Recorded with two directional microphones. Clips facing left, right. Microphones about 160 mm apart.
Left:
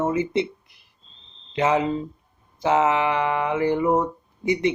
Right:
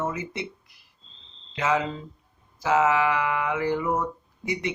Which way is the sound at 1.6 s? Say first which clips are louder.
Left 5 dB; 30° left (ahead or behind).